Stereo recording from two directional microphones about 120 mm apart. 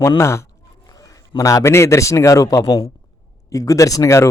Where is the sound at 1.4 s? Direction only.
25° left (ahead or behind).